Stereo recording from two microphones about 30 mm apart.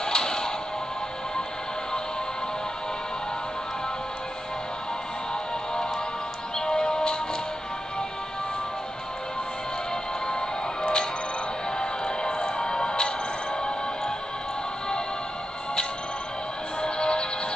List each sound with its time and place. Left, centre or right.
0.0 s music: left
6.6 s music: left
10.2 s music: left
16.8 s music: left